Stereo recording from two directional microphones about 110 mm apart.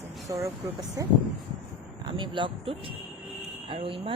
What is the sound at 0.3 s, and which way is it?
Speech, 25° right (ahead or behind).